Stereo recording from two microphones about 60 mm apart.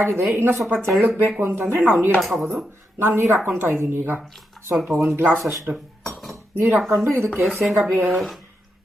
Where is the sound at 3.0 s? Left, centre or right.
Right.